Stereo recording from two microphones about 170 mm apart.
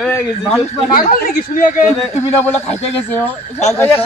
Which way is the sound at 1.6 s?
55° left (ahead or behind).